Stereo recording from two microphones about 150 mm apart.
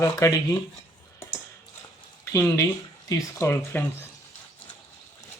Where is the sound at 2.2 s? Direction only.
20° left (ahead or behind).